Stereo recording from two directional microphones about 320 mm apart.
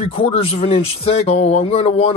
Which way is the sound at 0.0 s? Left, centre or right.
Centre.